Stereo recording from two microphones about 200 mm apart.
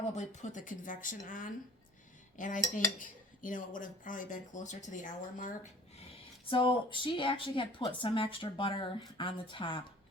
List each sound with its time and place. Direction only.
0.1 s dishes: 35° left (ahead or behind)
2.3 s cutlery: 40° left (ahead or behind)
2.7 s dishes: 40° left (ahead or behind)
6.5 s a woman's voice: 25° left (ahead or behind)